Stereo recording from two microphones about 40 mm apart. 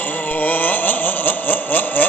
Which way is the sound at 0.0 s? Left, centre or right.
Left.